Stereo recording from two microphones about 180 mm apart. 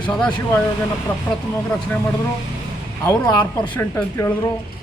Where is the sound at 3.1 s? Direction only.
20° left (ahead or behind).